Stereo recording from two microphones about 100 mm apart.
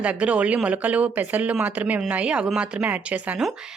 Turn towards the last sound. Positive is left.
turn(degrees=-15)  # may be behind; listen again after turning